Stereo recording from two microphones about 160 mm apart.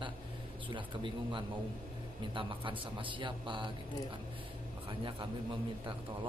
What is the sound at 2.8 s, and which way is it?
Speech, 30° right (ahead or behind).